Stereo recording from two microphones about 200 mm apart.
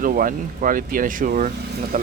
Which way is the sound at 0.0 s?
45° right (ahead or behind).